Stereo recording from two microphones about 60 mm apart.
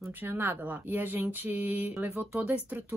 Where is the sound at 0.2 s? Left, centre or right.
Right.